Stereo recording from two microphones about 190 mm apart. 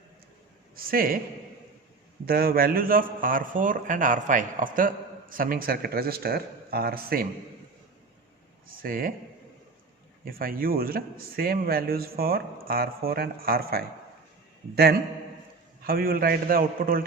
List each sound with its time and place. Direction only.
0.9 s a man's voice: 50° right (ahead or behind)
2.2 s a man's voice: 50° right (ahead or behind)
8.7 s a man's voice: 50° right (ahead or behind)
10.2 s a man's voice: 50° right (ahead or behind)
15.8 s a man's voice: 50° right (ahead or behind)